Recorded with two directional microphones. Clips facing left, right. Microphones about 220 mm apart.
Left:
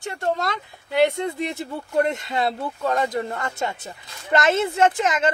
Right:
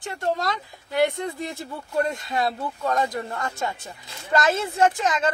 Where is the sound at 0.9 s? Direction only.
20° left (ahead or behind).